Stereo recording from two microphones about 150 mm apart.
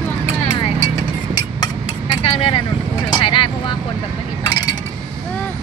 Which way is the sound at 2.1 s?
35° left (ahead or behind).